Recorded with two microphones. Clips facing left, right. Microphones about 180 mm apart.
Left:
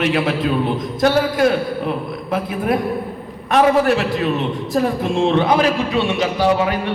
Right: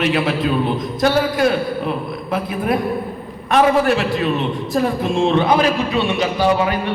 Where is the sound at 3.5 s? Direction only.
40° left (ahead or behind).